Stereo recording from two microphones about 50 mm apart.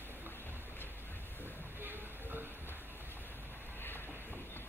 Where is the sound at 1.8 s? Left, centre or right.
Right.